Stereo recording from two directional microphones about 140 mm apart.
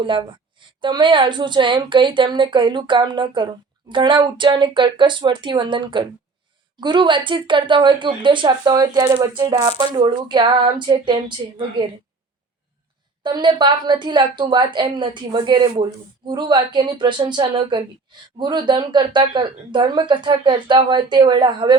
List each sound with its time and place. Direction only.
0.0 s a woman's voice: 35° right (ahead or behind)
13.2 s a woman's voice: 35° right (ahead or behind)